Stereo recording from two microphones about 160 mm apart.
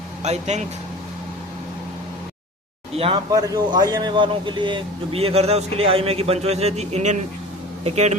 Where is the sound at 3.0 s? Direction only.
35° right (ahead or behind).